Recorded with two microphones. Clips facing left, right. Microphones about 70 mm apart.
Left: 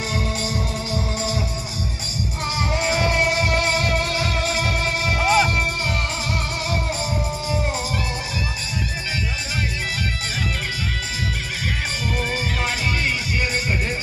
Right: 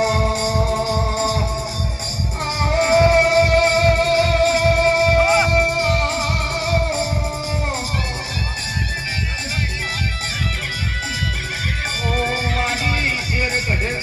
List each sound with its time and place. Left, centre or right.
0.0 s music: right
2.7 s music: right
12.1 s music: right